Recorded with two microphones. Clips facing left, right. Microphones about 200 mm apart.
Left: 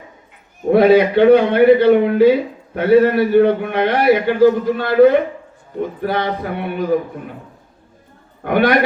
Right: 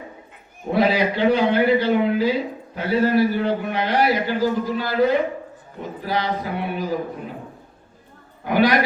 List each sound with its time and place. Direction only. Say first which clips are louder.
0.7 s a man's voice: left 9 dB; 60° left (ahead or behind)
8.4 s a man's voice: left 3 dB; 60° left (ahead or behind)